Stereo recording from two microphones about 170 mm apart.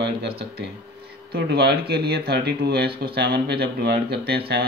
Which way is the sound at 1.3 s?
70° right (ahead or behind).